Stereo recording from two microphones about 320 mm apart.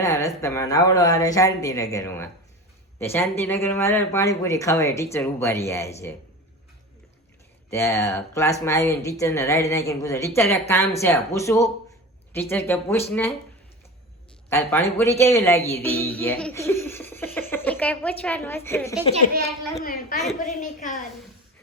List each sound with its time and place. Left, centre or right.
0.0 s speech: centre
7.7 s speech: centre
14.5 s speech: centre
17.7 s a sound: centre
18.2 s speech: centre
19.8 s a woman's voice: left